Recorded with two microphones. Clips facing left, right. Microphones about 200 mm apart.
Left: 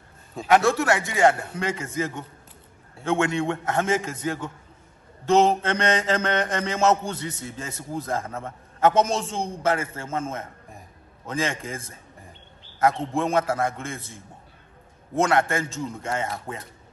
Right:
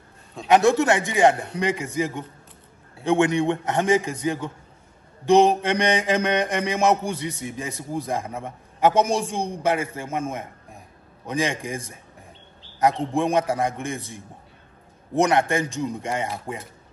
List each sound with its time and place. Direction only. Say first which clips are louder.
0.5 s mantra: right 2 dB; 20° right (ahead or behind)